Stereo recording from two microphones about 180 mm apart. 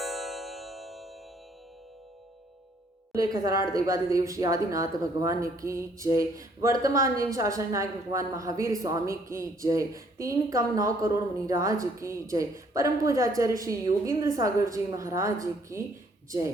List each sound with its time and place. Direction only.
0.0 s tubular bells: centre (ahead or behind)
3.1 s a woman's voice: 20° right (ahead or behind)